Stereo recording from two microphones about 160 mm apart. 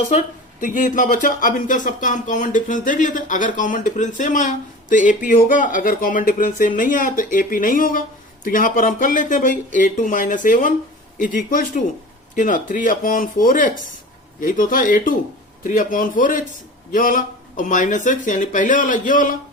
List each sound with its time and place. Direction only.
0.6 s speech: 55° left (ahead or behind)